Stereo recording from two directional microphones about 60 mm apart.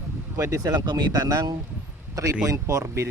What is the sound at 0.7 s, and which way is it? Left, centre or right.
Speech, right.